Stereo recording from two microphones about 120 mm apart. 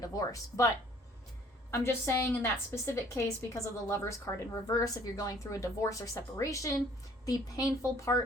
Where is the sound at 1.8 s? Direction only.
20° left (ahead or behind).